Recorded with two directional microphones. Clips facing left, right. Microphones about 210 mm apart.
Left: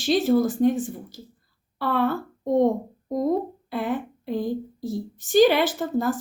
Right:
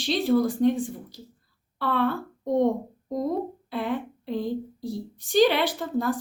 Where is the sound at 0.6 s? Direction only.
5° left (ahead or behind).